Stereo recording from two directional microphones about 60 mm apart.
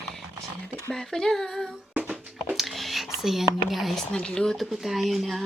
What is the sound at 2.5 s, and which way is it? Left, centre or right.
Whispering, centre.